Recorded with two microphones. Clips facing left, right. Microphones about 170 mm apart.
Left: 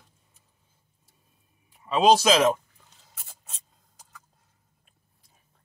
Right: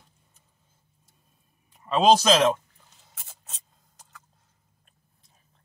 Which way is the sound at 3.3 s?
Centre (ahead or behind).